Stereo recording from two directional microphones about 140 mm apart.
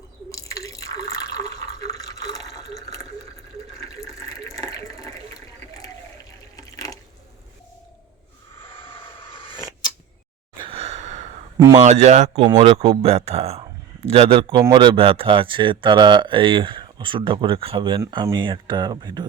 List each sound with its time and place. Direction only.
0.3 s drip: 25° left (ahead or behind)
4.0 s water: 25° left (ahead or behind)
9.3 s a sound: 40° left (ahead or behind)
10.6 s gasp: 45° right (ahead or behind)
11.5 s speech: 25° right (ahead or behind)
11.8 s speech: 55° right (ahead or behind); by 19.3 s 30° right (ahead or behind)